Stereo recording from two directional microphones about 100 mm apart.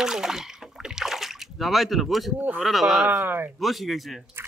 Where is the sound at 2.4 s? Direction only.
15° right (ahead or behind).